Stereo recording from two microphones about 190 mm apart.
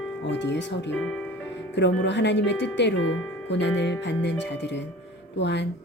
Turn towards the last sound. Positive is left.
turn(degrees=65)  # may be behind; listen again after turning